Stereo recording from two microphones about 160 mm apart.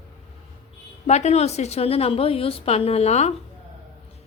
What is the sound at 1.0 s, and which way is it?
A woman's voice, 45° left (ahead or behind).